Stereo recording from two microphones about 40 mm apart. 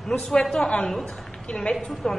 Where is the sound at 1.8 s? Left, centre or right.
Centre.